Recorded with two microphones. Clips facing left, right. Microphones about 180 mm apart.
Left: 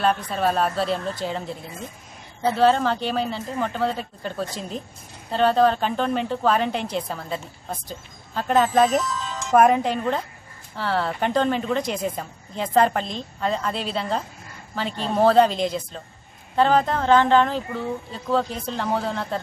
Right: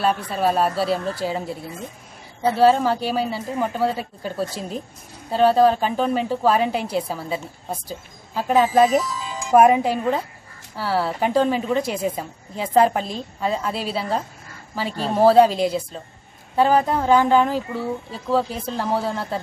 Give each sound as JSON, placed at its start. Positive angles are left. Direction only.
{"t": 0.0, "sound": "a woman's voice", "side_deg": -5}